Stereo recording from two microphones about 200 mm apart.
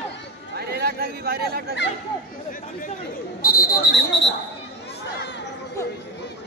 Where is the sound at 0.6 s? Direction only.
50° right (ahead or behind).